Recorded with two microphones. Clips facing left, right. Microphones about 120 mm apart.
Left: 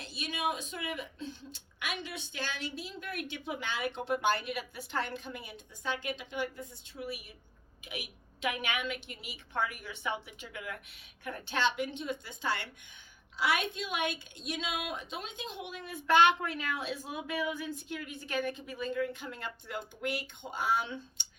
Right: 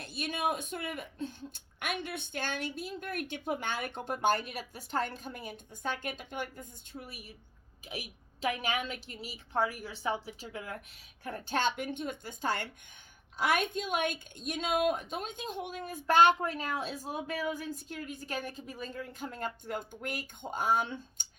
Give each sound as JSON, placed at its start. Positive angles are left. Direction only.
{"t": 0.0, "sound": "a woman's voice", "side_deg": -50}